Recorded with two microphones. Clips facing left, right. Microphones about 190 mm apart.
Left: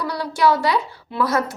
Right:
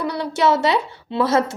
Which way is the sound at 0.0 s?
25° right (ahead or behind).